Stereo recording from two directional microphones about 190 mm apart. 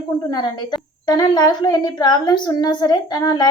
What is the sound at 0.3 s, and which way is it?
A woman's voice, 20° left (ahead or behind).